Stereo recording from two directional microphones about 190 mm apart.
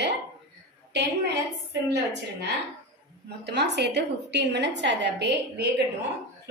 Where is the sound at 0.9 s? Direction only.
65° right (ahead or behind).